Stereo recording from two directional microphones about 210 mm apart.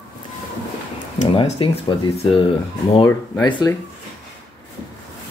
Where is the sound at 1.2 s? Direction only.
30° left (ahead or behind).